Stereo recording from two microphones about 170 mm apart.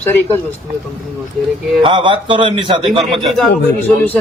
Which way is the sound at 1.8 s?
30° right (ahead or behind).